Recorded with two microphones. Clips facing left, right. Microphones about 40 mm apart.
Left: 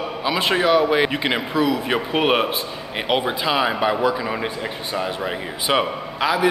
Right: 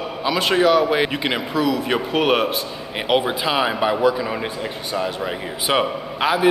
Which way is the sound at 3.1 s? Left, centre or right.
Centre.